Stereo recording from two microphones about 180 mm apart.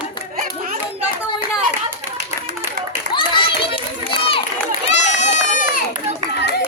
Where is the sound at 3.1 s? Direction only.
30° left (ahead or behind).